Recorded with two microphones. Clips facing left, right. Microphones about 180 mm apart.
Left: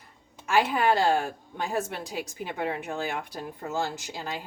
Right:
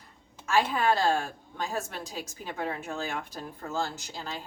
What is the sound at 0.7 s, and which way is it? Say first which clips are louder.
Speech: left 2 dB; 10° left (ahead or behind).